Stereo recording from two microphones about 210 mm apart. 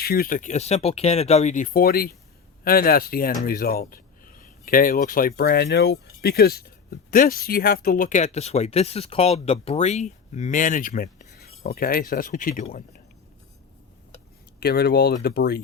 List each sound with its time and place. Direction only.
0.0 s speech: 45° left (ahead or behind)
14.6 s speech: 50° left (ahead or behind)